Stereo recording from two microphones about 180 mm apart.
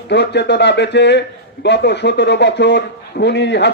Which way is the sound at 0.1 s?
70° left (ahead or behind).